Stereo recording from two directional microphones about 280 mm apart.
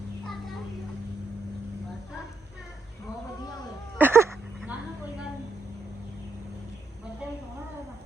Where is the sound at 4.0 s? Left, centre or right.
Centre.